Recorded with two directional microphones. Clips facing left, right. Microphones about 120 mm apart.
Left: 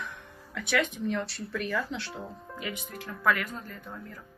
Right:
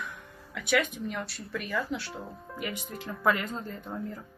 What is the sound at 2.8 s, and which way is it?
Speech, 15° right (ahead or behind).